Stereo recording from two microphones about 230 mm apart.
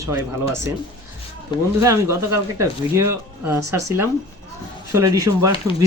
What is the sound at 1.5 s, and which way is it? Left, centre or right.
Speech, left.